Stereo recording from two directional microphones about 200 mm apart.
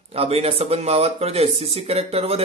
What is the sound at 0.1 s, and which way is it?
Speech, 30° right (ahead or behind).